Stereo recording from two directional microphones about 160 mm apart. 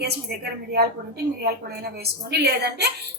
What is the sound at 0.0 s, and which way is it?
A woman's voice, 80° right.